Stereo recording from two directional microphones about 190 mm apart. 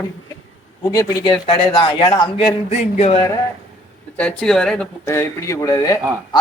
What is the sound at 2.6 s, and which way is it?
Speech, 30° left (ahead or behind).